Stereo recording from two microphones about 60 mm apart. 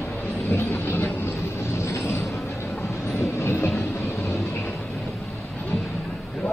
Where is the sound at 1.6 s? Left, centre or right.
Left.